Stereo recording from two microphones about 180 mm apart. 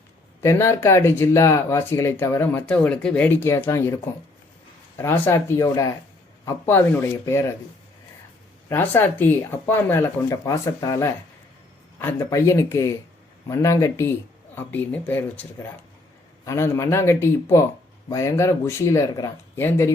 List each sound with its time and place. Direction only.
0.4 s speech: 15° left (ahead or behind)
4.9 s speech: 10° left (ahead or behind)
8.7 s speech: 10° left (ahead or behind)